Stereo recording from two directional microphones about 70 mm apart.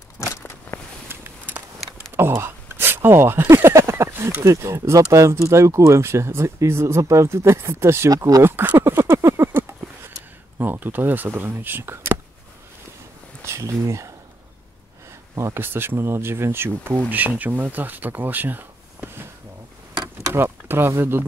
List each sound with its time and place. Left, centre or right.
0.7 s a sound: centre
1.0 s a sound: right
5.1 s speech: right
8.1 s speech: right
8.4 s a sound: right
10.6 s speech: right
13.5 s speech: right
15.3 s speech: right
20.2 s speech: right